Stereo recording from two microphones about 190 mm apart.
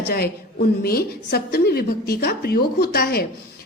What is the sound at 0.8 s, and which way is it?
A woman's voice, 55° left (ahead or behind).